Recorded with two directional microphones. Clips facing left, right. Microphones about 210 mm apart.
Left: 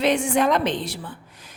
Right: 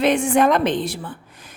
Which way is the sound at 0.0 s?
55° right (ahead or behind).